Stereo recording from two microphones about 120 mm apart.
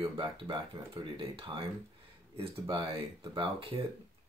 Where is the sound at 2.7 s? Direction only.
40° right (ahead or behind).